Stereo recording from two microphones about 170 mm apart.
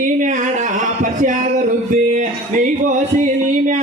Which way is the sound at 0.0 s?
50° right (ahead or behind).